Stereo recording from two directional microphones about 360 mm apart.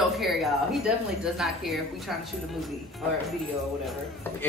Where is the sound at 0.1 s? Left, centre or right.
Centre.